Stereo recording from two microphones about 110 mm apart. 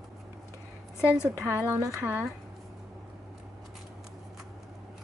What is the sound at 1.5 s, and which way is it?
Speech, 25° right (ahead or behind).